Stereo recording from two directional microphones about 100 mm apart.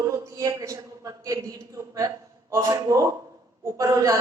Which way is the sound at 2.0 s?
40° right (ahead or behind).